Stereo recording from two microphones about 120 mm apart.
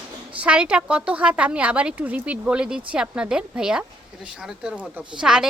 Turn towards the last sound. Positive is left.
turn(degrees=-5)  # may be behind; listen again after turning